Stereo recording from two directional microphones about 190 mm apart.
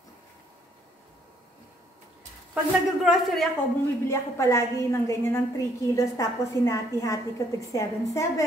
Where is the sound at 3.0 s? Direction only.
Centre (ahead or behind).